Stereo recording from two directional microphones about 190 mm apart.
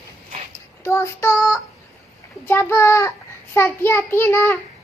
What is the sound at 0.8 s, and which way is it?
Child singing, 15° left (ahead or behind).